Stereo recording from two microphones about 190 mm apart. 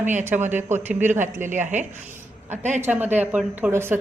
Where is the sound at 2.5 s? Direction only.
40° right (ahead or behind).